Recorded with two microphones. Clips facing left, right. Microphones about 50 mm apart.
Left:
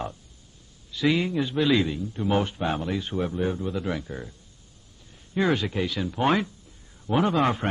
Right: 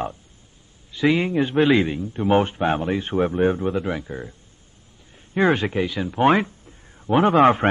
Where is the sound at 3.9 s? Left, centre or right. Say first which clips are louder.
Right 3 dB; right.